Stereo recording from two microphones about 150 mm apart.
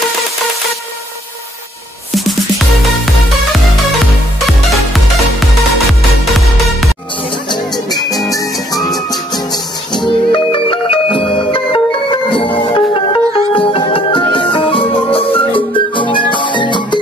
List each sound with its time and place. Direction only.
8.3 s music: 25° left (ahead or behind)